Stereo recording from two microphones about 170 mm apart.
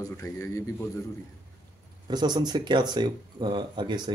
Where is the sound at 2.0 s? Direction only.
25° right (ahead or behind).